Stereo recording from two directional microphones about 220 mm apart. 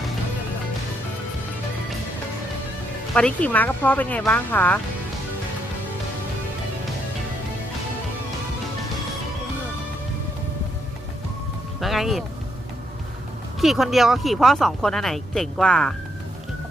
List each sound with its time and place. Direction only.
3.2 s speech: 5° left (ahead or behind)
11.8 s music: centre (ahead or behind)
13.6 s speech: centre (ahead or behind)